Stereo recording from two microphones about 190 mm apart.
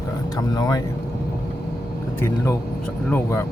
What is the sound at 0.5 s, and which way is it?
Speech, 20° left (ahead or behind).